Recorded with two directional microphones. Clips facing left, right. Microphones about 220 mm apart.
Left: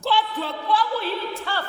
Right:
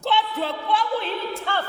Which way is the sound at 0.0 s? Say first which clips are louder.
Even; 20° right (ahead or behind).